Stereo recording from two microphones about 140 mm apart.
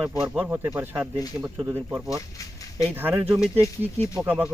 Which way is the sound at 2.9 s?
15° right (ahead or behind).